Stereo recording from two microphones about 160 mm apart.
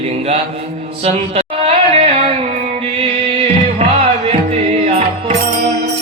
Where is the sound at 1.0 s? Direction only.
40° right (ahead or behind).